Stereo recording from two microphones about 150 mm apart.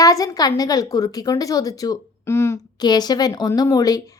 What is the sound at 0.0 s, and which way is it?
A woman's voice, 25° left (ahead or behind).